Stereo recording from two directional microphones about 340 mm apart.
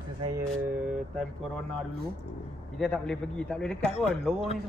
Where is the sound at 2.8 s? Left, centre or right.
Centre.